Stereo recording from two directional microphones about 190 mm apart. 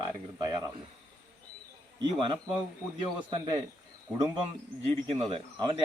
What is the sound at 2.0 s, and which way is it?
Speech, 25° right (ahead or behind).